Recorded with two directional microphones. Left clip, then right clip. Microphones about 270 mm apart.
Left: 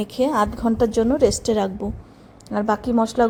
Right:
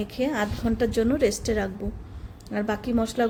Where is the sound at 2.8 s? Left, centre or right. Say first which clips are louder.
Left 6 dB; centre.